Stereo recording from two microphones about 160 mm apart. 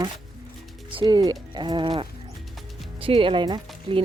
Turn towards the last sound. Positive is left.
turn(degrees=-30)  # may be behind; listen again after turning